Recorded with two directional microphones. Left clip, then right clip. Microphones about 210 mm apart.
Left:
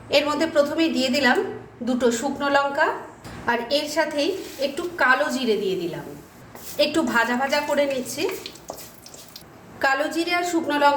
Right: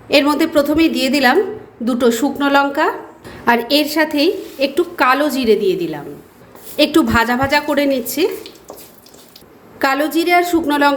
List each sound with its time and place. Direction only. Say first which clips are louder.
0.1 s a woman's voice: right 7 dB; 35° right (ahead or behind)
9.7 s a woman's voice: right 6 dB; 40° right (ahead or behind)